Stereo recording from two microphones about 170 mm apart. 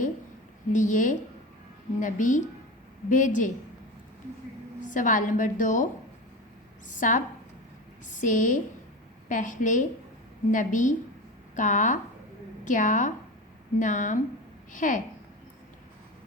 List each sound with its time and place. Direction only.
0.7 s a woman's voice: 50° left (ahead or behind)
4.8 s a woman's voice: 50° left (ahead or behind)